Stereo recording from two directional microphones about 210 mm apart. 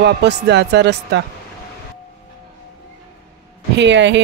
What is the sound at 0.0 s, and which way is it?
Speech, 55° right (ahead or behind).